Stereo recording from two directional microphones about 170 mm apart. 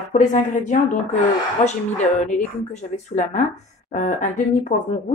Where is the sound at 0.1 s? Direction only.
45° left (ahead or behind).